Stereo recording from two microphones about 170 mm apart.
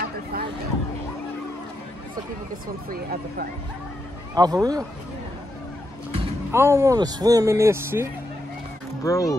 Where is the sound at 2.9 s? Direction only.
60° right (ahead or behind).